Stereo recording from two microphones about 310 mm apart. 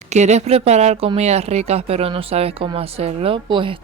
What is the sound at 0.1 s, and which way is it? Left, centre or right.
Speech, right.